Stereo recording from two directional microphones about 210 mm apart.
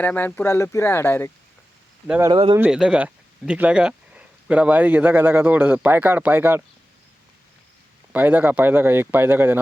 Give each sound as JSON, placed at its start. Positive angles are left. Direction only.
{"t": 0.0, "sound": "speech", "side_deg": 10}
{"t": 2.0, "sound": "speech", "side_deg": -10}
{"t": 2.3, "sound": "speech", "side_deg": -25}
{"t": 2.6, "sound": "speech", "side_deg": -5}
{"t": 8.1, "sound": "speech", "side_deg": -10}